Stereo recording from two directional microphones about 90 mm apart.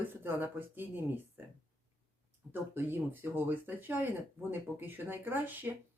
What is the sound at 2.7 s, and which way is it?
Speech, 25° right (ahead or behind).